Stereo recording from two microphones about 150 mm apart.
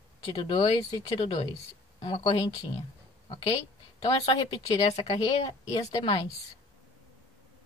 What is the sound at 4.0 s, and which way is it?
Speech, 40° left (ahead or behind).